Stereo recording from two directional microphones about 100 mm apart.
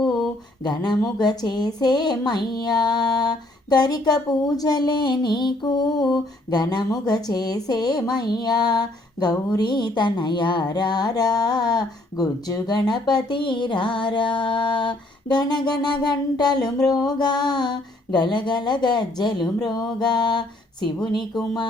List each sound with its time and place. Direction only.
0.6 s music: 45° left (ahead or behind)